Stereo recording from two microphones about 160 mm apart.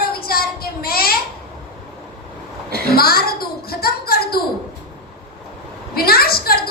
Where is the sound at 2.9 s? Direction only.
70° left (ahead or behind).